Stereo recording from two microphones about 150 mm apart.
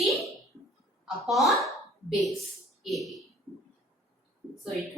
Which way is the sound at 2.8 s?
Centre (ahead or behind).